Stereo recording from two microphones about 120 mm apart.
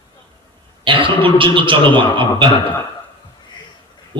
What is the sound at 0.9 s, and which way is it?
A man's voice, 45° right (ahead or behind).